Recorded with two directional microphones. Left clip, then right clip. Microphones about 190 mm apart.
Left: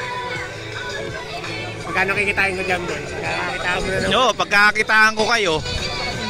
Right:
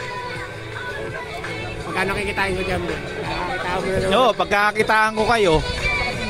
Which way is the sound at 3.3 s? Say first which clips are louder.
Left 2 dB; 75° right (ahead or behind).